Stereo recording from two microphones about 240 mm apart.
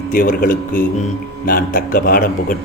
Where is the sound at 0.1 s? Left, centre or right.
Left.